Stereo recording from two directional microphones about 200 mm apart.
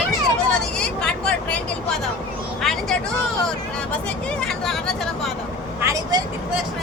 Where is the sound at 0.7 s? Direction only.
5° left (ahead or behind).